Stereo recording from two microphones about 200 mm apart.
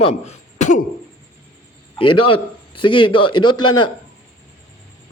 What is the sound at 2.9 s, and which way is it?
A man's voice, 25° left (ahead or behind).